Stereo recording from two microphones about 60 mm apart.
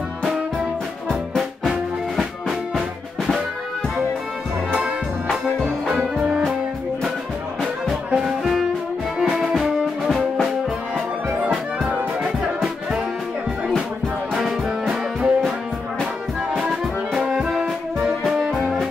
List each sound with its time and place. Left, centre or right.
8.1 s music: centre
11.2 s music: right
13.7 s music: centre
16.5 s music: centre
17.2 s brass instrument: centre
18.0 s music: centre